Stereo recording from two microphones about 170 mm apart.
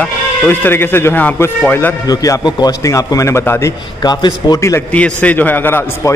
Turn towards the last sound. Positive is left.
turn(degrees=10)  # may be behind; listen again after turning